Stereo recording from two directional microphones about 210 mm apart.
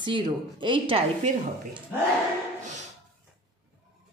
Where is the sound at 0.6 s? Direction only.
25° right (ahead or behind).